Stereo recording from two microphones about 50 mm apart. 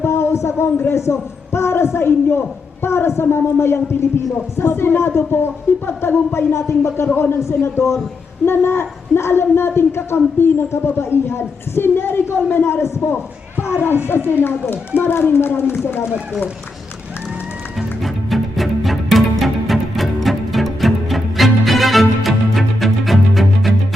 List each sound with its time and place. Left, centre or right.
0.0 s a man's voice: left
8.4 s a man's voice: left
13.6 s a sound: left
14.3 s a woman's voice: left
17.7 s music: centre